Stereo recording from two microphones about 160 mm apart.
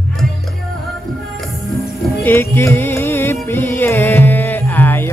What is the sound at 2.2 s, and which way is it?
Music, 10° left (ahead or behind).